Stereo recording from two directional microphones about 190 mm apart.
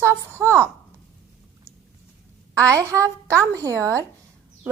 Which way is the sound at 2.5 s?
15° right (ahead or behind).